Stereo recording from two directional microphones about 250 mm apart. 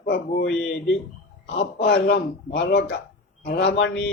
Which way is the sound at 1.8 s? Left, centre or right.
Left.